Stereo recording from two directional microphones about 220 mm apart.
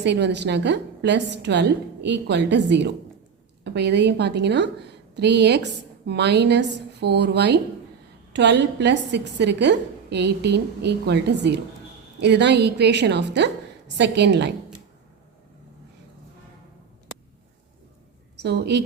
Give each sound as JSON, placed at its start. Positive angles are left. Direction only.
{"t": 0.0, "sound": "a woman's voice", "side_deg": -50}
{"t": 18.4, "sound": "a woman's voice", "side_deg": -50}